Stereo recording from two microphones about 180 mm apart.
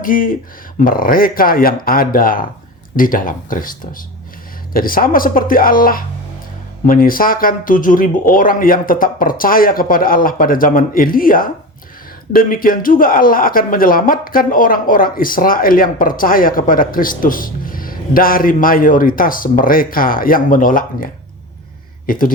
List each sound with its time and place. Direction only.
0.0 s speech: 50° left (ahead or behind)